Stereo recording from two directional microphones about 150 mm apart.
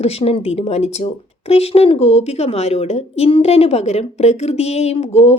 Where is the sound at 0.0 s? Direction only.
40° left (ahead or behind).